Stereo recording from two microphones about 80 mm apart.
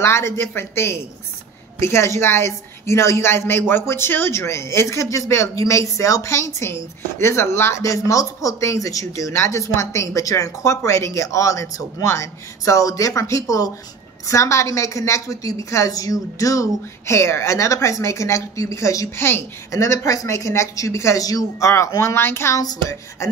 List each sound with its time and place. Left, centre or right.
0.0 s speech: left
22.6 s speech: left